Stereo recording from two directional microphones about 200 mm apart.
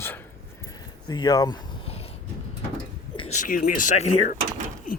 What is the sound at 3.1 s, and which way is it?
Speech, 35° left (ahead or behind).